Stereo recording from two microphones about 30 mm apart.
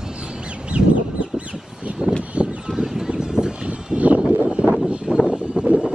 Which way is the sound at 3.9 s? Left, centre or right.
Right.